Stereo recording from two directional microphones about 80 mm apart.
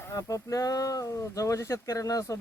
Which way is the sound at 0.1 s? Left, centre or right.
Left.